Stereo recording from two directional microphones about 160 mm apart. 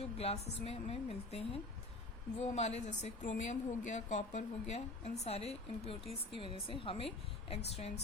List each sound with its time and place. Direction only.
0.0 s speech: 40° left (ahead or behind)